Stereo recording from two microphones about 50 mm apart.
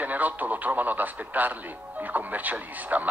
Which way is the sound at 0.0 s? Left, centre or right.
Right.